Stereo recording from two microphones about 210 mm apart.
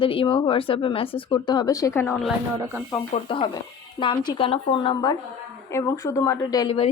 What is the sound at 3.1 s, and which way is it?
A woman's voice, 25° left (ahead or behind).